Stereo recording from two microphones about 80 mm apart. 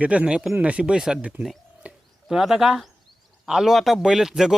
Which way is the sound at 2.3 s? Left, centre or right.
Centre.